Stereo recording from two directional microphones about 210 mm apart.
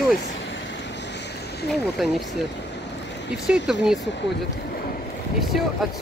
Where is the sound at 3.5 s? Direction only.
Centre (ahead or behind).